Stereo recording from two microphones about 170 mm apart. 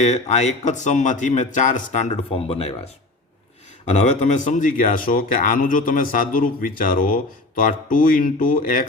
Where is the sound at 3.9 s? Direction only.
40° left (ahead or behind).